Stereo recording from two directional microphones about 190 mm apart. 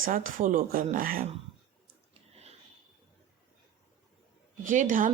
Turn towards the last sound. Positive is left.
turn(degrees=-40)  # may be behind; listen again after turning